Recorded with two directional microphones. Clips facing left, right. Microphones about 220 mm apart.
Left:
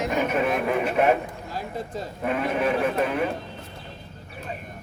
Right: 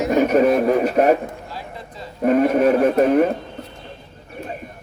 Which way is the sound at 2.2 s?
40° right (ahead or behind).